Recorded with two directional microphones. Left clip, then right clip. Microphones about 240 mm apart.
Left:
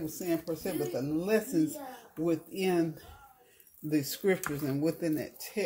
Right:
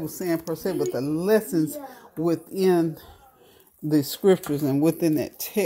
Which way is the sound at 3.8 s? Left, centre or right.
Right.